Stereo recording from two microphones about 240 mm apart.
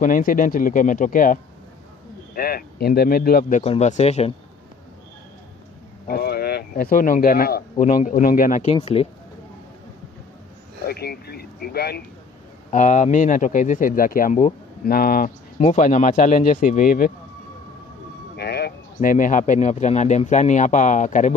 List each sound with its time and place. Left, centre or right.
0.0 s speech: left
6.0 s speech: left
10.9 s speech: left
12.7 s speech: left
18.3 s speech: left